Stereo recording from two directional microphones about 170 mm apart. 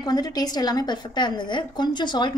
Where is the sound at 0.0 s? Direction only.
25° left (ahead or behind).